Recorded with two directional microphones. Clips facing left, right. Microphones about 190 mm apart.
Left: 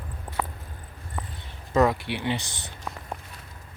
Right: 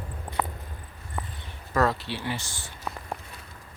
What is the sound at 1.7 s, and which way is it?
Speech, 15° left (ahead or behind).